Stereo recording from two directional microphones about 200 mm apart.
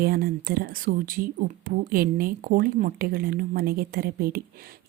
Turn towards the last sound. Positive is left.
turn(degrees=-45)  # may be behind; listen again after turning